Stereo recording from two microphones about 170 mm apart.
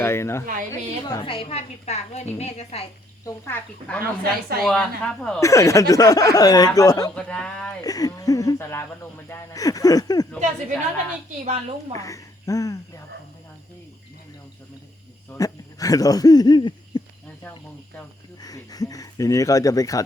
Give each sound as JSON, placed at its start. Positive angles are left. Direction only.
{"t": 0.0, "sound": "speech", "side_deg": 15}
{"t": 1.0, "sound": "a woman's voice", "side_deg": 25}
{"t": 3.2, "sound": "speech", "side_deg": 15}
{"t": 4.2, "sound": "speech", "side_deg": -65}
{"t": 4.6, "sound": "speech", "side_deg": 5}
{"t": 5.4, "sound": "speech", "side_deg": 20}
{"t": 7.2, "sound": "speech", "side_deg": 5}
{"t": 7.9, "sound": "speech", "side_deg": 20}
{"t": 11.4, "sound": "a woman's voice", "side_deg": -40}
{"t": 11.9, "sound": "speech", "side_deg": 20}
{"t": 15.4, "sound": "speech", "side_deg": 20}
{"t": 18.3, "sound": "speech", "side_deg": 20}